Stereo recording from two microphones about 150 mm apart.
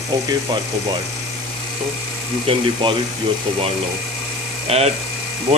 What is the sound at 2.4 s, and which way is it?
Speech, 40° right (ahead or behind).